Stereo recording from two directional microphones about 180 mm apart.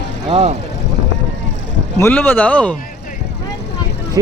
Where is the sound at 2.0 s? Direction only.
10° left (ahead or behind).